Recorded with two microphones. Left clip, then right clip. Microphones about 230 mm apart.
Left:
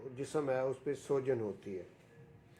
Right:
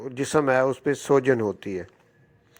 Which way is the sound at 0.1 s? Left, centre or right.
Right.